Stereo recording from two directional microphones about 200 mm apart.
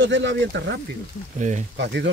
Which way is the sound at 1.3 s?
35° right (ahead or behind).